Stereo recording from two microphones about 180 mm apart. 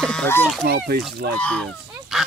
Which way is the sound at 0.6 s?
60° right (ahead or behind).